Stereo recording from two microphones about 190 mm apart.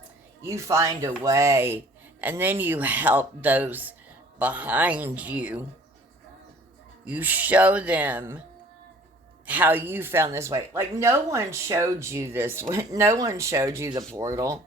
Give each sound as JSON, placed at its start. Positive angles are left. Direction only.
{"t": 0.4, "sound": "speech", "side_deg": -15}
{"t": 7.0, "sound": "speech", "side_deg": -10}
{"t": 9.5, "sound": "speech", "side_deg": -10}